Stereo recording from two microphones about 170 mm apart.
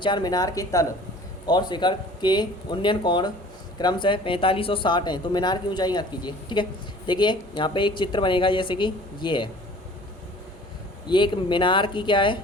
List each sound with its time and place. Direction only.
0.0 s speech: 25° left (ahead or behind)
11.1 s speech: 30° left (ahead or behind)